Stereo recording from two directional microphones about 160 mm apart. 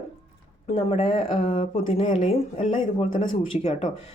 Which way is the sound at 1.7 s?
55° left (ahead or behind).